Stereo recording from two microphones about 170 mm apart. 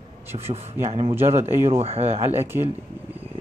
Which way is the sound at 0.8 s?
40° right (ahead or behind).